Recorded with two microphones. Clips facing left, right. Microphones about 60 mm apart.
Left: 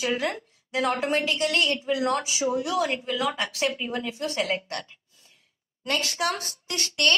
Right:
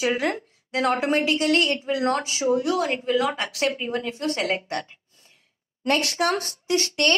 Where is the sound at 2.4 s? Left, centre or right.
Right.